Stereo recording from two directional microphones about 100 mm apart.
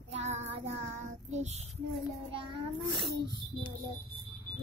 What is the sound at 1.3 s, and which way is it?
A child's voice, 90° right.